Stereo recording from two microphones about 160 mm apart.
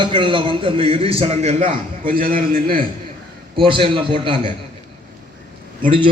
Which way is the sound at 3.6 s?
30° right (ahead or behind).